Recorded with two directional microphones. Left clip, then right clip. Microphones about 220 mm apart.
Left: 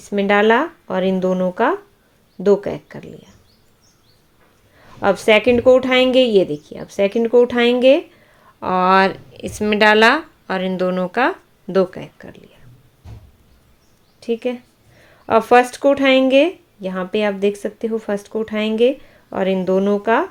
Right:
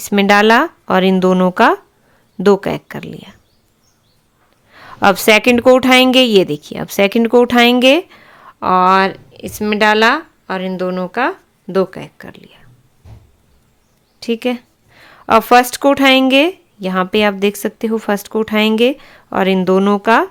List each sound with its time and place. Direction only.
0.0 s a woman's voice: 30° right (ahead or behind)
4.7 s a woman's voice: 30° right (ahead or behind)
14.2 s a woman's voice: 25° right (ahead or behind)